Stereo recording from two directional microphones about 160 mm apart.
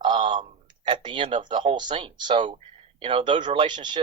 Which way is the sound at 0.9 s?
30° right (ahead or behind).